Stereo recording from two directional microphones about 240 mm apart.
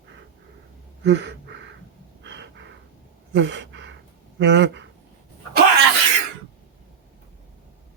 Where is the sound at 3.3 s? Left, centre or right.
Right.